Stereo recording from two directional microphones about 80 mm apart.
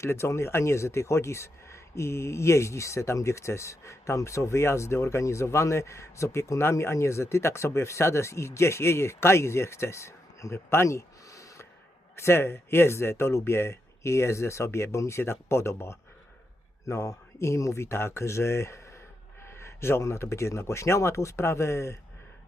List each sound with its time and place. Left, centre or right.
0.0 s speech: left